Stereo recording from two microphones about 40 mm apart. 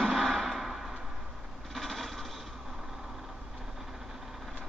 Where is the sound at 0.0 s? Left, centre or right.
Centre.